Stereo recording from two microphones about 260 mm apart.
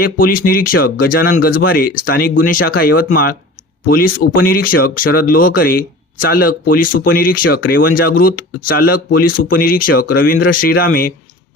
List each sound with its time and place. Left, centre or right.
0.0 s speech: left